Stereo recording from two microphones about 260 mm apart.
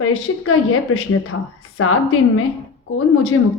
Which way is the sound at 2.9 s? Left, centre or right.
Left.